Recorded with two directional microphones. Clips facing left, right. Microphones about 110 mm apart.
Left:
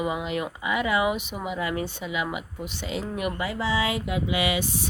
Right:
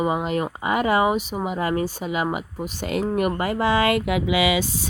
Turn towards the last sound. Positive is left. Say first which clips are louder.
# right 5 dB
turn(degrees=-90)